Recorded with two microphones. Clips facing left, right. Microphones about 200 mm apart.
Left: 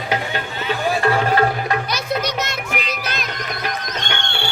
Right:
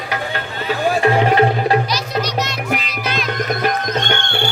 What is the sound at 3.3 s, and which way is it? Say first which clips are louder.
Music: right 7 dB; 50° right (ahead or behind).